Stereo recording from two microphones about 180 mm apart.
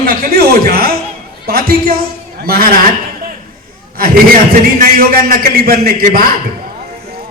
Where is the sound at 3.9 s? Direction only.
55° right (ahead or behind).